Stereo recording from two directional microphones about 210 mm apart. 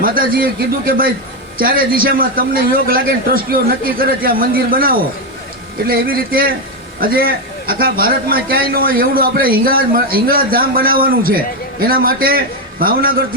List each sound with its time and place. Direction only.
0.0 s a man's voice: 45° right (ahead or behind)